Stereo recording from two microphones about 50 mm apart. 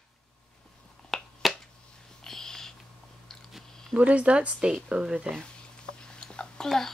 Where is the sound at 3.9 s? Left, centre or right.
Right.